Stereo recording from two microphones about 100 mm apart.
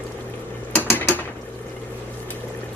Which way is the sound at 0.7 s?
20° left (ahead or behind).